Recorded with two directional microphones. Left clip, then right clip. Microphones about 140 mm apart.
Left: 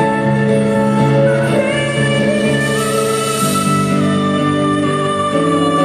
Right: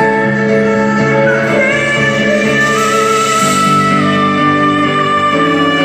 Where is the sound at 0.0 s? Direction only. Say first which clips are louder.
Right 4 dB; 20° left (ahead or behind).